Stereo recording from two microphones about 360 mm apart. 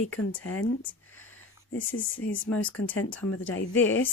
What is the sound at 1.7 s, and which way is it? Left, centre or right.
A woman's voice, left.